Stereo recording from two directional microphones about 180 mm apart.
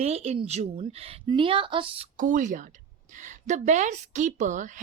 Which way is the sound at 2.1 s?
45° right (ahead or behind).